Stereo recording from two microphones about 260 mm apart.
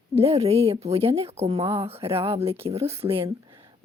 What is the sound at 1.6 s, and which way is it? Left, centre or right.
Speech, centre.